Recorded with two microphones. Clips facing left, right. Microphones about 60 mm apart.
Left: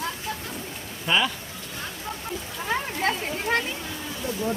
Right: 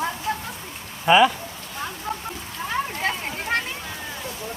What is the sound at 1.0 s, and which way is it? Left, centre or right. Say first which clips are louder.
Speech: right 8 dB; centre.